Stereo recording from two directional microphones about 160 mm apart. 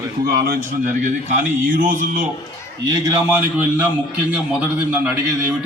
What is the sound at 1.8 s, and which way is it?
Speech, 60° right (ahead or behind).